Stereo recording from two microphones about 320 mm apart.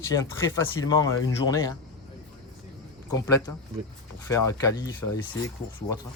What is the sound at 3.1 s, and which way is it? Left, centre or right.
Speech, centre.